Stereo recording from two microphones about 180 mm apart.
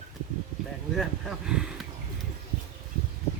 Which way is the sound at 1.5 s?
5° right (ahead or behind).